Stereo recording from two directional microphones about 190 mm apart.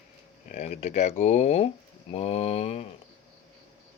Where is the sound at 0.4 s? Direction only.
40° left (ahead or behind).